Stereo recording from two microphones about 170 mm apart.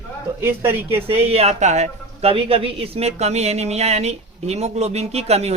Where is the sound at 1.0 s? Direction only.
35° right (ahead or behind).